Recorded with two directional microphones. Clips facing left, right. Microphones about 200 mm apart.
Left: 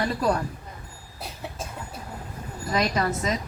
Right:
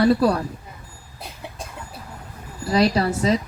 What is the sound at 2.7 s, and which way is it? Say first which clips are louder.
Speech: right 6 dB; 30° right (ahead or behind).